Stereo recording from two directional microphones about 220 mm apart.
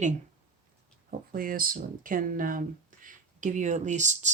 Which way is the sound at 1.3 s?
40° right (ahead or behind).